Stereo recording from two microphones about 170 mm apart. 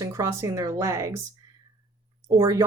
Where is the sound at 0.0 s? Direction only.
15° right (ahead or behind).